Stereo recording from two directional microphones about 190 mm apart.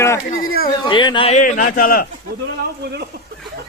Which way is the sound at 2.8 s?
60° right (ahead or behind).